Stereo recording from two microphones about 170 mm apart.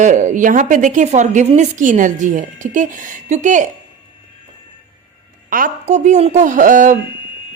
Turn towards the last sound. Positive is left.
turn(degrees=-50)  # may be behind; listen again after turning